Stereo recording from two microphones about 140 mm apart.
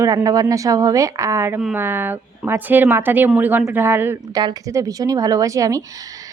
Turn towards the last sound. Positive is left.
turn(degrees=-25)  # may be behind; listen again after turning